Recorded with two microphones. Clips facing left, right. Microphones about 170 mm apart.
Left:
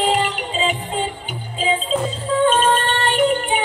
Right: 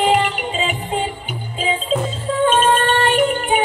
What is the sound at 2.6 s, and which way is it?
Music, 45° right (ahead or behind).